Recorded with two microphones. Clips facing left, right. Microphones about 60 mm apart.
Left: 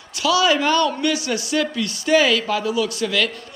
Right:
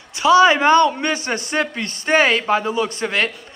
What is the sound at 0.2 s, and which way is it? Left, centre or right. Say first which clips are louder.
A man's voice: right 5 dB; right.